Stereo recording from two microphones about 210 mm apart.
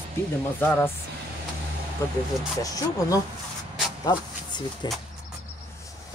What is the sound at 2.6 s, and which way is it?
Speech, 15° left (ahead or behind).